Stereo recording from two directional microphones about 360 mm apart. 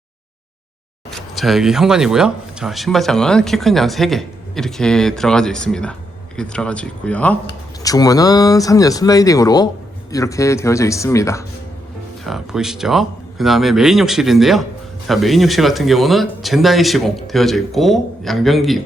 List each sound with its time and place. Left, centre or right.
1.1 s speech: centre